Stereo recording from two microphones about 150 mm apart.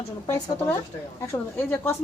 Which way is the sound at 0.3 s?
15° left (ahead or behind).